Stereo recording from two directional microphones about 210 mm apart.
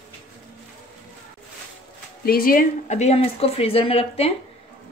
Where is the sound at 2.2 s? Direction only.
45° left (ahead or behind).